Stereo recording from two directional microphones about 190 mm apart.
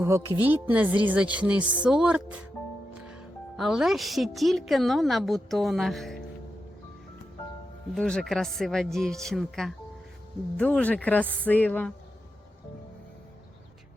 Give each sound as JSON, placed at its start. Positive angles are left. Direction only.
{"t": 0.4, "sound": "speech", "side_deg": -10}
{"t": 3.6, "sound": "a woman's voice", "side_deg": 0}
{"t": 7.9, "sound": "a woman's voice", "side_deg": 5}